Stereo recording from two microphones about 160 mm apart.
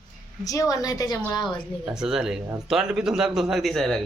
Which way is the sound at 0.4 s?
20° left (ahead or behind).